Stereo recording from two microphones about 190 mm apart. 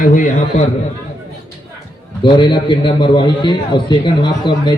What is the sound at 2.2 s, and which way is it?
A man's voice, 25° left (ahead or behind).